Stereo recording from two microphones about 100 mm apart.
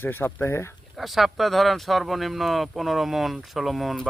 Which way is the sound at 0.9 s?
Centre (ahead or behind).